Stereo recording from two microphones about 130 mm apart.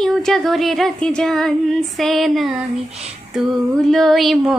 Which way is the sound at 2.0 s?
Centre (ahead or behind).